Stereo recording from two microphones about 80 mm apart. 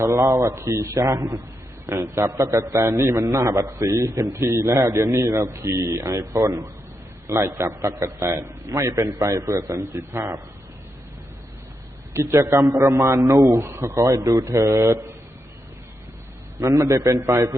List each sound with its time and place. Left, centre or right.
0.0 s a man's voice: right
12.1 s a man's voice: right
13.7 s a man's voice: right
16.6 s a man's voice: right